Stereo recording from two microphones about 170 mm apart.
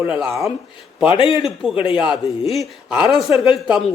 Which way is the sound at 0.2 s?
Centre (ahead or behind).